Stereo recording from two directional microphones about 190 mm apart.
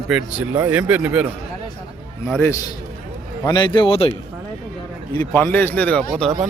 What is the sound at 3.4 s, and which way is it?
Speech, 20° left (ahead or behind).